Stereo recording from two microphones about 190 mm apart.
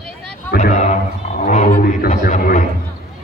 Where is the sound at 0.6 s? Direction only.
40° left (ahead or behind).